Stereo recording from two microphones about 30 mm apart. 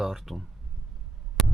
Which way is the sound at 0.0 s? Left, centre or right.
Centre.